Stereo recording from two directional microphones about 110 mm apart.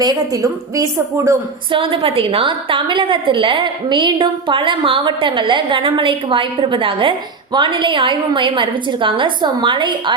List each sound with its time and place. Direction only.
0.0 s a woman's voice: 35° right (ahead or behind)
1.7 s a woman's voice: 55° right (ahead or behind)